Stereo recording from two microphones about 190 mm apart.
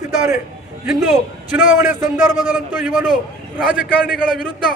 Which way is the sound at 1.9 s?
40° left (ahead or behind).